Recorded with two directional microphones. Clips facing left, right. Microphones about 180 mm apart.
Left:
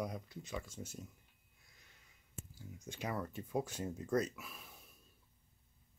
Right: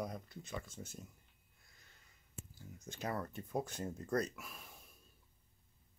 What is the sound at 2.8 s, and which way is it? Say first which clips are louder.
Speech: even; 10° left (ahead or behind).